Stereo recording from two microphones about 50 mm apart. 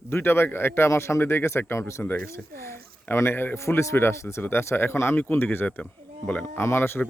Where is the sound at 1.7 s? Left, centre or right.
Left.